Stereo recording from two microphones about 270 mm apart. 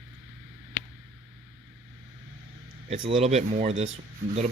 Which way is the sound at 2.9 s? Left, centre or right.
Centre.